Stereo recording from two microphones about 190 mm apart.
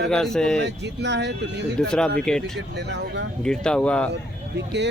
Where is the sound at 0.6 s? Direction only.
65° right (ahead or behind).